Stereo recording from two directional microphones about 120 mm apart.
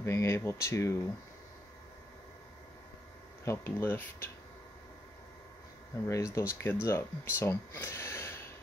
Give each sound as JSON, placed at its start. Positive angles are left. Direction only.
{"t": 0.0, "sound": "speech", "side_deg": 20}
{"t": 3.4, "sound": "speech", "side_deg": 20}
{"t": 6.0, "sound": "speech", "side_deg": 25}